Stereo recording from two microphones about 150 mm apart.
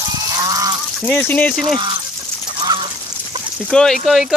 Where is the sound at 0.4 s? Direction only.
25° right (ahead or behind).